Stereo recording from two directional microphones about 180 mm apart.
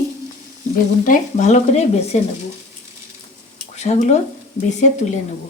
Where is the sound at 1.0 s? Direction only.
45° left (ahead or behind).